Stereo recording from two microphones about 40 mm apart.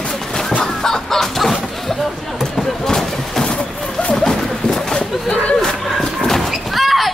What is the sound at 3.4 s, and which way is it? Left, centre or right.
Vehicle, left.